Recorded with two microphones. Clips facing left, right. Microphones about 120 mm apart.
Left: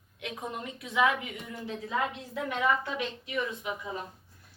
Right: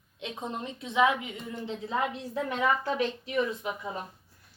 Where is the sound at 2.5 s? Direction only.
35° right (ahead or behind).